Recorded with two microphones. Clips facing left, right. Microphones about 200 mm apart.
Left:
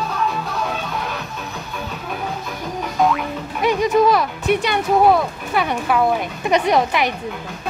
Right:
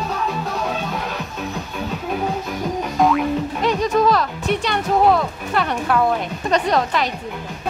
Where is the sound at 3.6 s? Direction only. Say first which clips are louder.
Left 3 dB; 10° left (ahead or behind).